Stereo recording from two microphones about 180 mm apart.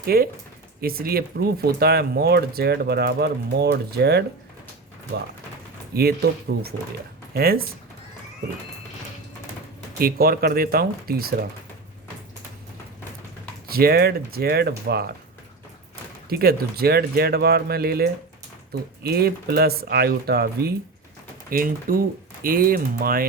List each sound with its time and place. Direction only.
0.0 s speech: 55° right (ahead or behind)
5.9 s speech: 60° right (ahead or behind)
10.0 s speech: 55° right (ahead or behind)
13.7 s speech: 55° right (ahead or behind)
16.3 s speech: 60° right (ahead or behind)
21.5 s speech: 50° right (ahead or behind)